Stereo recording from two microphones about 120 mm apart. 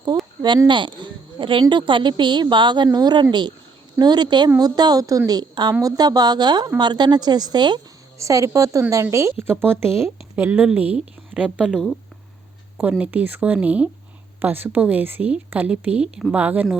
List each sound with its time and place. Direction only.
0.7 s a sound: 40° right (ahead or behind)
1.7 s a woman's voice: 45° right (ahead or behind); by 11.9 s 5° right (ahead or behind)
13.0 s a woman's voice: 10° right (ahead or behind)